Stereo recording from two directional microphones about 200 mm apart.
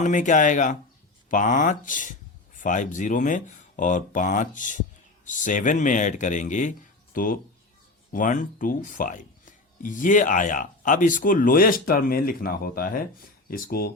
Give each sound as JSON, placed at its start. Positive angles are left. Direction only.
{"t": 0.0, "sound": "speech", "side_deg": 40}